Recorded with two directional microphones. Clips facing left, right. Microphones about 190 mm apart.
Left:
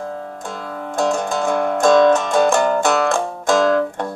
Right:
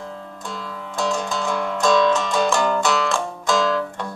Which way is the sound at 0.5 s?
50° left (ahead or behind).